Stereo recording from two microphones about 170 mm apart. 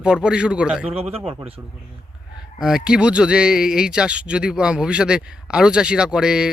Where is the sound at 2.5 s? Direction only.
5° right (ahead or behind).